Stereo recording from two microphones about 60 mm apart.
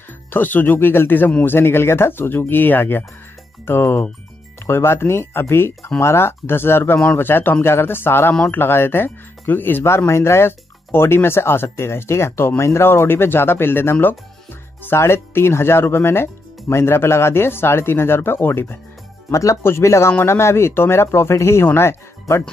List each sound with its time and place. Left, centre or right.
0.3 s speech: left
19.3 s speech: left
19.6 s speech: left